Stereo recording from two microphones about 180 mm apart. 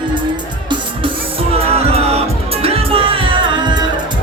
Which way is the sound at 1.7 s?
35° right (ahead or behind).